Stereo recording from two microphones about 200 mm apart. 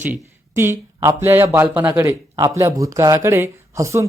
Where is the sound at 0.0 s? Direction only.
10° right (ahead or behind).